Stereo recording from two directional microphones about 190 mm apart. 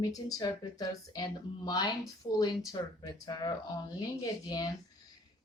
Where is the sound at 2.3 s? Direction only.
35° left (ahead or behind).